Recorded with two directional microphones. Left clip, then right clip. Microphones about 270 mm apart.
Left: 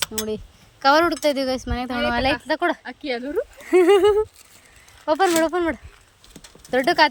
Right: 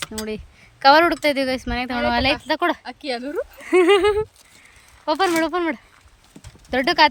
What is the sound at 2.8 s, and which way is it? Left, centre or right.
Speech, right.